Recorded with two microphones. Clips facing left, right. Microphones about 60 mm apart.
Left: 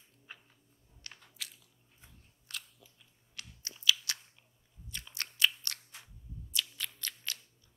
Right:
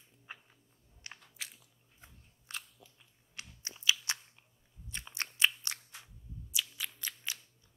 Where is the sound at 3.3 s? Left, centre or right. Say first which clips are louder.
Right 1 dB; right.